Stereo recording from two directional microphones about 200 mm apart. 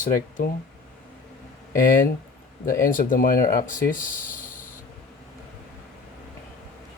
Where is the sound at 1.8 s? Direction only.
45° left (ahead or behind).